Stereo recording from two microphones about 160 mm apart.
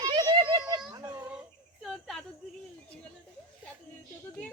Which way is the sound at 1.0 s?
15° right (ahead or behind).